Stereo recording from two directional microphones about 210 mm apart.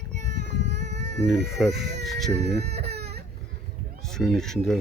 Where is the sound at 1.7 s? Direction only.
55° right (ahead or behind).